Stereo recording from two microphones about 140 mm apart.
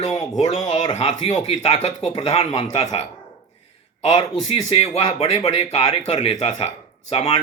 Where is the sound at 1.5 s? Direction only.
50° left (ahead or behind).